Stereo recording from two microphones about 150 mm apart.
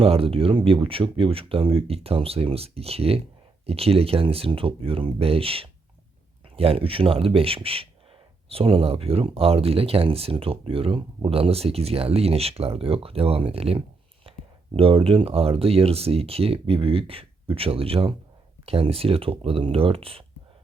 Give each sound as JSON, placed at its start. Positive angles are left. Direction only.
{"t": 0.0, "sound": "speech", "side_deg": -40}
{"t": 14.3, "sound": "a sound", "side_deg": -35}
{"t": 14.8, "sound": "speech", "side_deg": -40}